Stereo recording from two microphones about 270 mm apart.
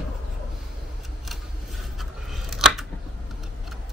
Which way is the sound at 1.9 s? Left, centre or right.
Centre.